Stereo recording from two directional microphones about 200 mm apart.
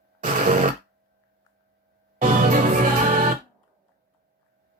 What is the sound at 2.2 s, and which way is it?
Music, 40° right (ahead or behind).